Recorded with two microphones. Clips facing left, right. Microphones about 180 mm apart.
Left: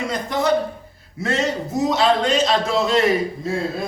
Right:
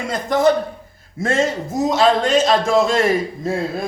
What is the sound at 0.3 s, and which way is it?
A man's voice, 45° right (ahead or behind).